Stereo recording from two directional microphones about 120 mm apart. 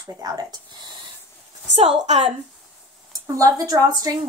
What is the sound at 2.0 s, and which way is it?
Speech, 60° right (ahead or behind).